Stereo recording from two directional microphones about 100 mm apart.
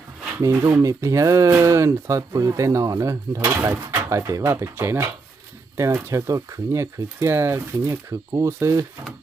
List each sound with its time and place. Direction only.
0.3 s speech: 30° right (ahead or behind)